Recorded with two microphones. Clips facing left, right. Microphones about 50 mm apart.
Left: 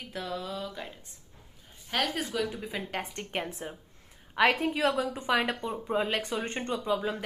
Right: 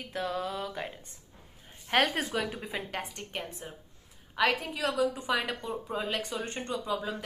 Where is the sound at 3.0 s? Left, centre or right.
Left.